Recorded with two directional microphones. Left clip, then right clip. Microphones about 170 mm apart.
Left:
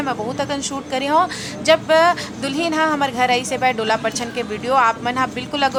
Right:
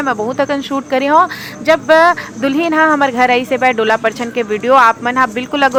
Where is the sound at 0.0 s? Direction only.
20° right (ahead or behind).